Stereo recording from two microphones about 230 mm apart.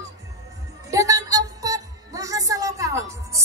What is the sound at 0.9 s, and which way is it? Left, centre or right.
Music, centre.